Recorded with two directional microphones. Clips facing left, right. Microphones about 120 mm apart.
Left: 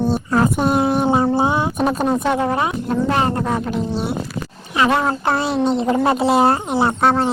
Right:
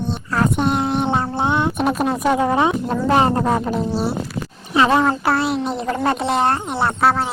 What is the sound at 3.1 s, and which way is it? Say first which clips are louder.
Speech: right 6 dB; 25° right (ahead or behind).